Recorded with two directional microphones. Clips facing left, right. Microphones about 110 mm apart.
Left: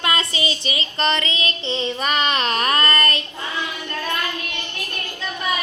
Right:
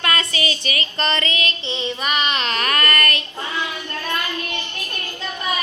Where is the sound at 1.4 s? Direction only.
35° left (ahead or behind).